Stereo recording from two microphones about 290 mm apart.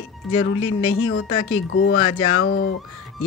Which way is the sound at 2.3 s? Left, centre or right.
Left.